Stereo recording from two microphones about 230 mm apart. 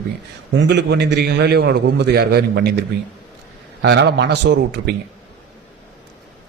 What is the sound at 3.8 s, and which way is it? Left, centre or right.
Speech, right.